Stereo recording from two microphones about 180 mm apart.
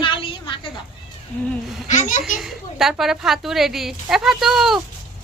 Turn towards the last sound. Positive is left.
turn(degrees=0)  # may be behind; listen again after turning